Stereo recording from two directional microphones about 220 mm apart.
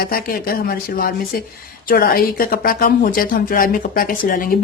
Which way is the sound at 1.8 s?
40° left (ahead or behind).